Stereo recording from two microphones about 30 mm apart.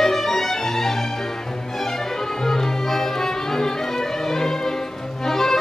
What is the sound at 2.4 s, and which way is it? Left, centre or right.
Music, centre.